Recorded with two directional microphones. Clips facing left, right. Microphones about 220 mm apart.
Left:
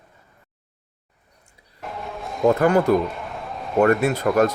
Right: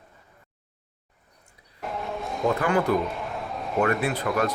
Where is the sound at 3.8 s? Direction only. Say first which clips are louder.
Left 7 dB; 45° left (ahead or behind).